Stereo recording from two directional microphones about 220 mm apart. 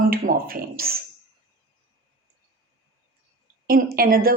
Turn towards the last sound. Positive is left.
turn(degrees=-40)  # may be behind; listen again after turning